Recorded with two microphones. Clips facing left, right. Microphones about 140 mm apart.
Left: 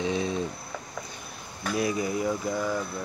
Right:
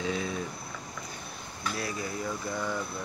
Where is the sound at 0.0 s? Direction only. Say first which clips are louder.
Left 4 dB; 20° left (ahead or behind).